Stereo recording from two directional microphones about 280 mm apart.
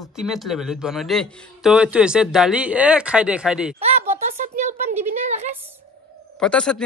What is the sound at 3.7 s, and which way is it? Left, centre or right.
Speech, right.